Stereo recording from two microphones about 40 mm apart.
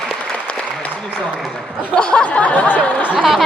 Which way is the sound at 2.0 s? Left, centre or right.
Left.